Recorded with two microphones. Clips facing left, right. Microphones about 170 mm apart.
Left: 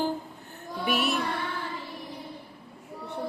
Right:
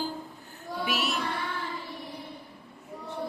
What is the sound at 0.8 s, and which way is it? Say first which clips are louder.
Music: left 4 dB; 55° left (ahead or behind).